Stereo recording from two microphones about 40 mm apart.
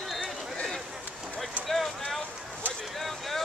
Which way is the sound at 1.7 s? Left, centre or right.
Centre.